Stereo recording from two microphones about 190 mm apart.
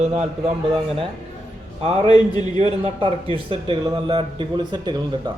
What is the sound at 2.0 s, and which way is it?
Speech, 20° left (ahead or behind).